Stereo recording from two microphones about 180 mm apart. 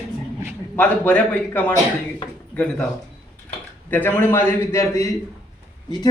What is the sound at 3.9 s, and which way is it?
A man's voice, 10° left (ahead or behind).